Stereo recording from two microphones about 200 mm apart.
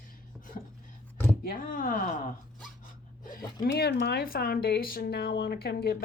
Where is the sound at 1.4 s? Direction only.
45° left (ahead or behind).